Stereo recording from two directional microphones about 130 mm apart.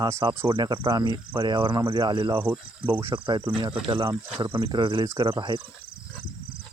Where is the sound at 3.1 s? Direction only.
35° right (ahead or behind).